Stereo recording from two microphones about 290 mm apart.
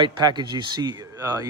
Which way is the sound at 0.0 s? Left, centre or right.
Centre.